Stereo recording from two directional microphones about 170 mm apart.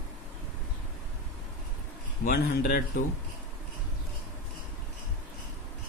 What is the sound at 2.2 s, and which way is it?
Speech, 55° left (ahead or behind).